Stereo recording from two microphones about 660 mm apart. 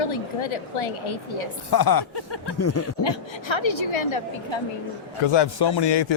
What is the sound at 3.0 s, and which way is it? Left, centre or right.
Speech, left.